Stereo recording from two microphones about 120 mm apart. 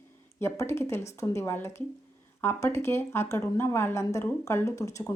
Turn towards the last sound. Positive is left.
turn(degrees=25)  # may be behind; listen again after turning